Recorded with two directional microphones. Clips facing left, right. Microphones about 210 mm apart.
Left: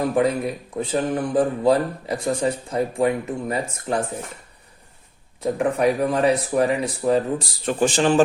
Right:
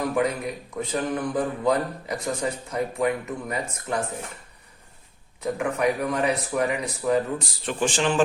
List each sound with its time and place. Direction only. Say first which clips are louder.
0.0 s speech: left 4 dB; 30° left (ahead or behind)
5.4 s speech: left 4 dB; 30° left (ahead or behind)